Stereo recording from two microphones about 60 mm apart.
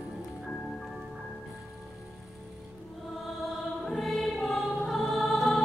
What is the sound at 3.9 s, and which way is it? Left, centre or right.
Choir, centre.